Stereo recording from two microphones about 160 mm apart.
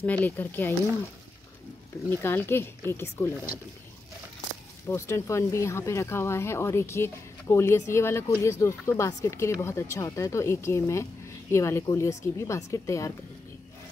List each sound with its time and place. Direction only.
0.0 s speech: 10° left (ahead or behind)
2.0 s speech: 15° left (ahead or behind)
4.8 s a woman's voice: 15° left (ahead or behind)